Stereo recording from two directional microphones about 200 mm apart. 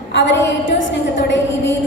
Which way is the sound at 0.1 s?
65° left (ahead or behind).